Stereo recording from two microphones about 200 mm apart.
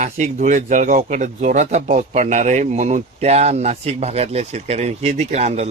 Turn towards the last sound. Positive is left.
turn(degrees=-35)  # may be behind; listen again after turning